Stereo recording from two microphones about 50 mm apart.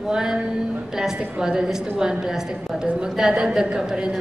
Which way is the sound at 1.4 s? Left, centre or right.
Centre.